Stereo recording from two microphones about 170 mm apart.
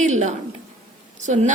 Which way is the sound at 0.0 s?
45° right (ahead or behind).